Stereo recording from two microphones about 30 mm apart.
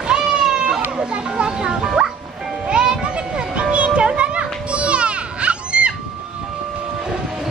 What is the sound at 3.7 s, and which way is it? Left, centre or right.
Children playing, right.